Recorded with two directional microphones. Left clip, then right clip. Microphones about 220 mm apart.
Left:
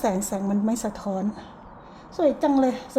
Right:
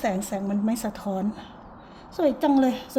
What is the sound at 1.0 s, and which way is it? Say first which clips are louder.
Speech: left 1 dB; 15° right (ahead or behind).